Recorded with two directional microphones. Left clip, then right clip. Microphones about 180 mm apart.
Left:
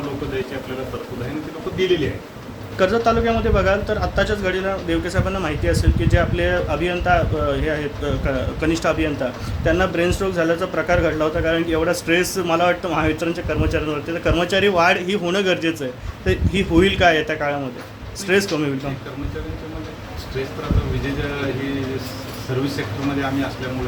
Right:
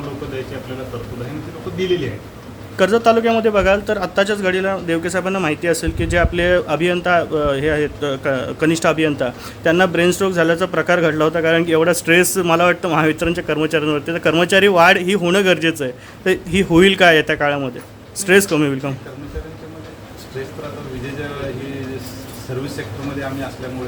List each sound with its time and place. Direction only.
2.7 s speech: 45° right (ahead or behind)